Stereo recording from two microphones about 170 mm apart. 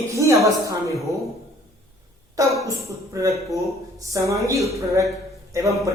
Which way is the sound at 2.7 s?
20° right (ahead or behind).